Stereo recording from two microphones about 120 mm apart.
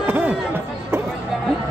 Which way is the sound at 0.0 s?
15° right (ahead or behind).